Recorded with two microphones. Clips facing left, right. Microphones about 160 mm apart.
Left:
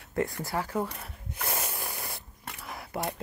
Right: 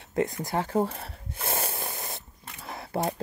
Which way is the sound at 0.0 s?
20° right (ahead or behind).